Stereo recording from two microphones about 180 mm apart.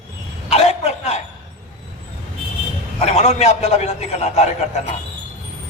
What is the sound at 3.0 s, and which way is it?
A man's voice, 35° left (ahead or behind).